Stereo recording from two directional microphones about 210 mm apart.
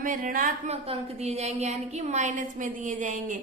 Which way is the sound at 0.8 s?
30° right (ahead or behind).